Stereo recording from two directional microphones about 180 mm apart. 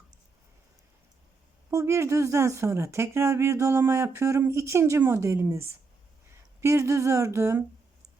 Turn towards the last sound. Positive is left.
turn(degrees=-15)  # may be behind; listen again after turning